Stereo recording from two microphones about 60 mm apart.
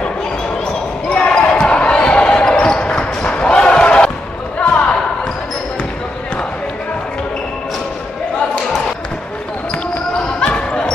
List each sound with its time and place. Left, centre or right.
1.0 s basketball bounce: centre
4.6 s a sound: left
10.5 s basketball bounce: centre